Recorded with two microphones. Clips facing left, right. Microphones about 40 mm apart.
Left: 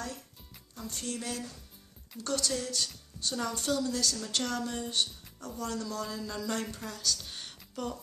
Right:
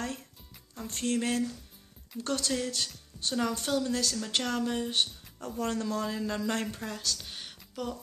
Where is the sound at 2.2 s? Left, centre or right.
Right.